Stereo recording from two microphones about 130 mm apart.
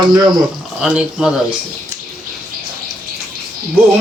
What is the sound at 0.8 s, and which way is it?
Speech, 5° right (ahead or behind).